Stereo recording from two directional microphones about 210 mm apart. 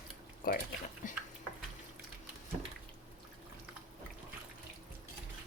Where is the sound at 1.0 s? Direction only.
40° left (ahead or behind).